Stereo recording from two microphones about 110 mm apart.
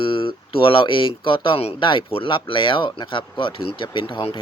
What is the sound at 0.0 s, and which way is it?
Speech, 50° left (ahead or behind).